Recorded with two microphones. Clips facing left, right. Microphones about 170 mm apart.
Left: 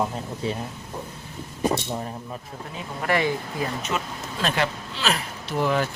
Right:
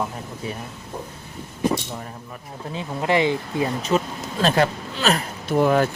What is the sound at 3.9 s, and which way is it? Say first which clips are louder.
Speech: right 7 dB; 30° right (ahead or behind).